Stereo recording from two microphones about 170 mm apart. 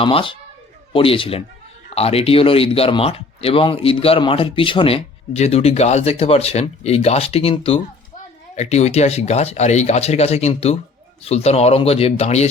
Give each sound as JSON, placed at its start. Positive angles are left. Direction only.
{"t": 0.0, "sound": "speech", "side_deg": 30}